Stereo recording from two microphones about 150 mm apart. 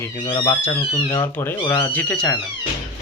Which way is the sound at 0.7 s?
30° left (ahead or behind).